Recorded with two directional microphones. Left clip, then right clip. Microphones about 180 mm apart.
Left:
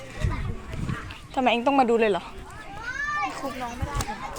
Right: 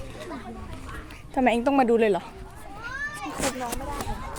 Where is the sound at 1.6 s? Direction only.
25° right (ahead or behind).